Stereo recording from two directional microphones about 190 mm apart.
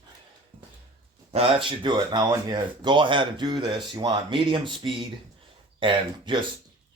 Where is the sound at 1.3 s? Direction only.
30° right (ahead or behind).